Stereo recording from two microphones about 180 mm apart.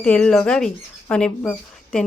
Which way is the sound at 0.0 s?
5° left (ahead or behind).